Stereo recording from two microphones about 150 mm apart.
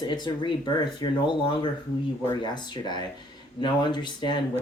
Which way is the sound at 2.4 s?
30° left (ahead or behind).